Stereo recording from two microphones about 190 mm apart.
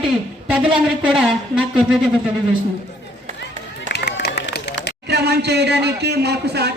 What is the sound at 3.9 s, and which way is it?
Run, 60° left (ahead or behind).